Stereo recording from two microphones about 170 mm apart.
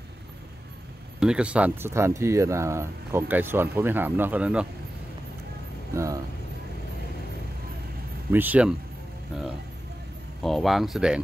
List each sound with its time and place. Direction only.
1.2 s speech: 5° right (ahead or behind)
5.9 s speech: 20° right (ahead or behind)
8.3 s speech: 10° right (ahead or behind)